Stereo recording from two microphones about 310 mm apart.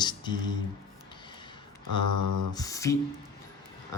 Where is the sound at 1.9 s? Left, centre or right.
Right.